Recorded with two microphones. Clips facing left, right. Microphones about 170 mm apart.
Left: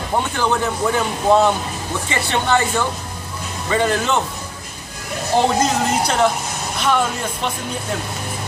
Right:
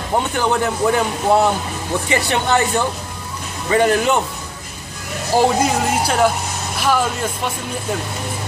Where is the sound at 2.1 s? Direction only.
15° right (ahead or behind).